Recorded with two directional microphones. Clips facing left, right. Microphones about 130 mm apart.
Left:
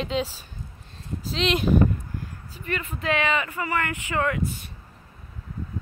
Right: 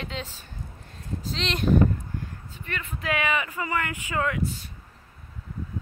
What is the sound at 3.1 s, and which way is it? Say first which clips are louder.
Speech: left 2 dB; 15° right (ahead or behind).